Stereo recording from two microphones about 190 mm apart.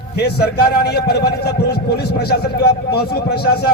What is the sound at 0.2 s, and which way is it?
A man's voice, 55° left (ahead or behind).